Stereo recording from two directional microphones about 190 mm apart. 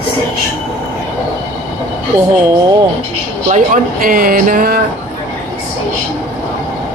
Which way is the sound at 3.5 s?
40° right (ahead or behind).